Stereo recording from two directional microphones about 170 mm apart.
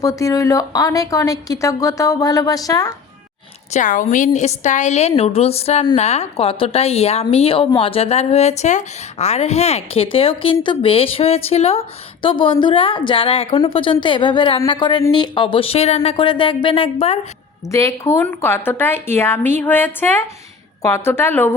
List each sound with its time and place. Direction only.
0.0 s a woman's voice: 20° left (ahead or behind)
3.7 s a woman's voice: 50° left (ahead or behind); by 17.2 s 35° left (ahead or behind)
17.7 s a woman's voice: 20° left (ahead or behind)